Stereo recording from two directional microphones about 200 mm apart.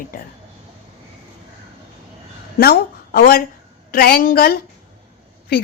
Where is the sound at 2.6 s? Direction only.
50° left (ahead or behind).